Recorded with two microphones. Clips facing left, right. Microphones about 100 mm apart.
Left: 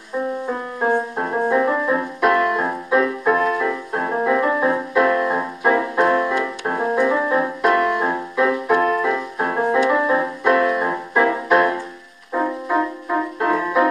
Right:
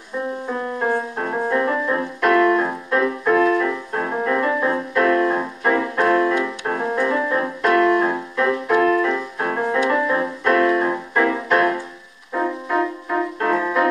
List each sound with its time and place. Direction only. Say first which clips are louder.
0.5 s music: even; 10° left (ahead or behind)
8.8 s music: right 1 dB; 20° left (ahead or behind)